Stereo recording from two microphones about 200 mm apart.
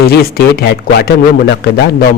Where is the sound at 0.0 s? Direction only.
50° left (ahead or behind).